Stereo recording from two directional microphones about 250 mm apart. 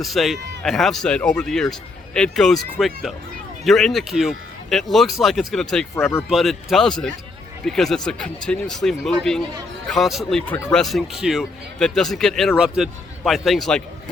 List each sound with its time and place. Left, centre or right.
0.0 s speech: centre